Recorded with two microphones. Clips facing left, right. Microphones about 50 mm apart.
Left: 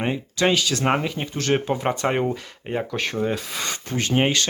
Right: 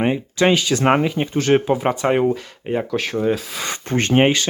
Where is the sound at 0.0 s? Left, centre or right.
Centre.